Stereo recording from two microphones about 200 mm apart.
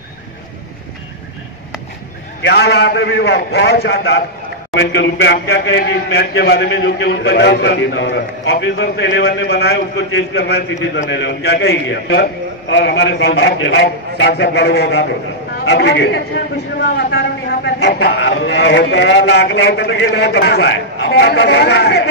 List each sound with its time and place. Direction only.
2.4 s a man's voice: 55° left (ahead or behind)